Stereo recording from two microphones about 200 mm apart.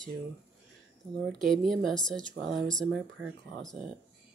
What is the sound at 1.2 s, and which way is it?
Speech, centre (ahead or behind).